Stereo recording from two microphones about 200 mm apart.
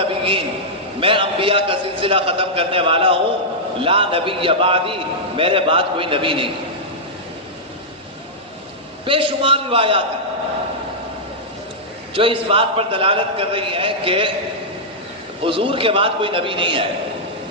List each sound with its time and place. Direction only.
0.0 s a sound: 25° right (ahead or behind)
0.9 s a man's voice: 25° right (ahead or behind)
9.0 s a man's voice: 25° right (ahead or behind)
12.1 s a man's voice: 25° right (ahead or behind)
15.4 s a man's voice: 25° right (ahead or behind)